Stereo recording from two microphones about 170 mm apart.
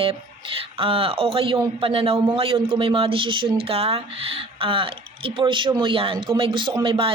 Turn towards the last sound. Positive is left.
turn(degrees=-30)  # may be behind; listen again after turning